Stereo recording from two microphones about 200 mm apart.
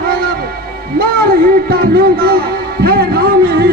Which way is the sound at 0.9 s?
50° right (ahead or behind).